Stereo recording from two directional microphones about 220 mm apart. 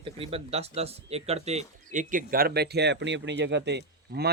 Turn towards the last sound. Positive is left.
turn(degrees=-50)  # may be behind; listen again after turning